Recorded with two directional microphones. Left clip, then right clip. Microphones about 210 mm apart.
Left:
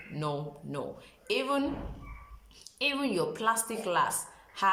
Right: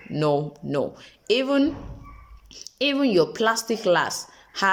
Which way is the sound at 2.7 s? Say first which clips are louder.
Right 9 dB; 35° right (ahead or behind).